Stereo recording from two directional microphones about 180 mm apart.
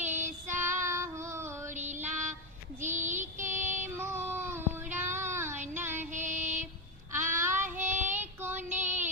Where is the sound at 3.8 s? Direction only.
15° right (ahead or behind).